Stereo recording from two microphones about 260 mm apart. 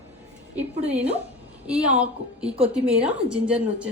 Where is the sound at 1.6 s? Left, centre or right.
Centre.